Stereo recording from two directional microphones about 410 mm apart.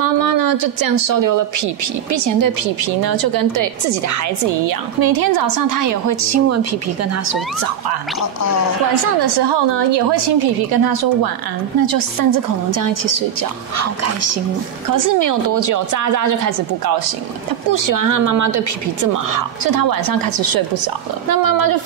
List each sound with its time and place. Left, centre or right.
0.0 s a woman's voice: right
9.5 s a woman's voice: right
14.0 s speech: right
14.9 s a woman's voice: right